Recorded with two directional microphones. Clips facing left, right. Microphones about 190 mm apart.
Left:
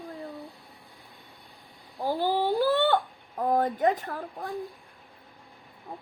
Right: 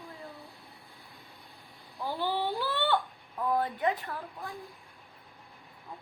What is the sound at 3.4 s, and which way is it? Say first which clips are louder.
Speech: left 5 dB; 45° left (ahead or behind).